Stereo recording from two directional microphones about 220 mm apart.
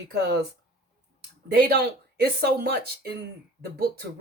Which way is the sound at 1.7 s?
45° right (ahead or behind).